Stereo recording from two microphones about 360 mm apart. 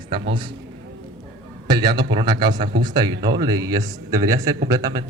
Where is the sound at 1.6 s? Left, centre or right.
Centre.